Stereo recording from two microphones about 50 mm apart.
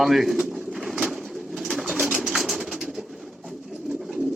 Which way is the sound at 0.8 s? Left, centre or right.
Centre.